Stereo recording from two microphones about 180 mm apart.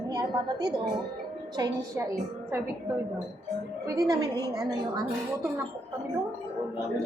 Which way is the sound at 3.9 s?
20° right (ahead or behind).